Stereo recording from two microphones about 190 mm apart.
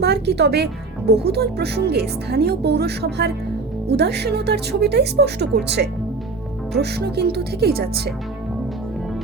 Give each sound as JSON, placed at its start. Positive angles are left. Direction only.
{"t": 0.0, "sound": "speech", "side_deg": -60}
{"t": 7.0, "sound": "speech", "side_deg": -55}